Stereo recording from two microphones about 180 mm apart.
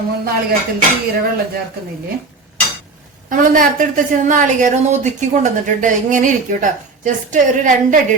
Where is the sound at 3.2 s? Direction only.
50° right (ahead or behind).